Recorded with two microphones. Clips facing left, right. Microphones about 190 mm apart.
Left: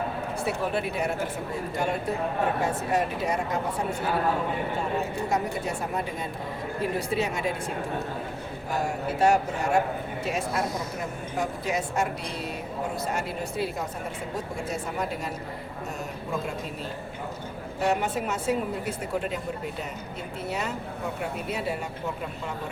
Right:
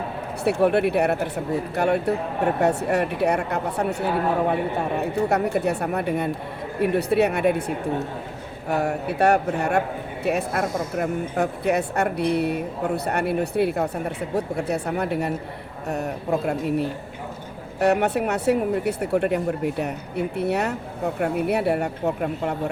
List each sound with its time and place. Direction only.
0.4 s speech: 65° right (ahead or behind)
4.9 s speech: 65° right (ahead or behind)
8.7 s speech: 65° right (ahead or behind)